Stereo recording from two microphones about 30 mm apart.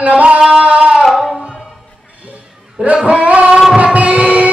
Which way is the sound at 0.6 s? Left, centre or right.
Right.